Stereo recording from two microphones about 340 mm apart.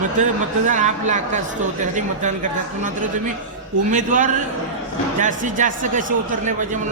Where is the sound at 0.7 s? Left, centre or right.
Right.